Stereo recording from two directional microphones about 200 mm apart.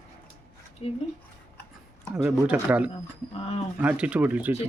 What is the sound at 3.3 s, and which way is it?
Speech, 30° left (ahead or behind).